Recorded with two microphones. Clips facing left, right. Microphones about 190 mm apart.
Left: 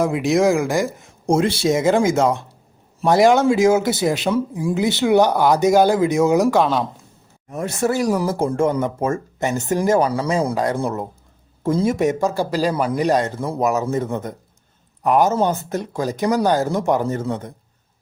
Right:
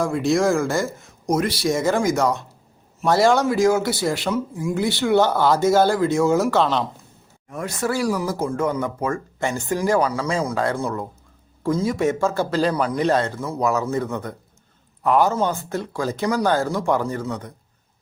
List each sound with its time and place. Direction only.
0.0 s speech: 20° left (ahead or behind)
7.5 s speech: 25° left (ahead or behind)
10.5 s speech: 15° left (ahead or behind)